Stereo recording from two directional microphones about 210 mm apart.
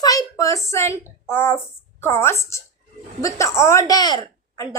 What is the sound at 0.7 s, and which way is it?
A woman's voice, 10° left (ahead or behind).